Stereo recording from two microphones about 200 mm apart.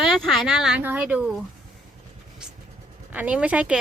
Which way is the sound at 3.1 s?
5° right (ahead or behind).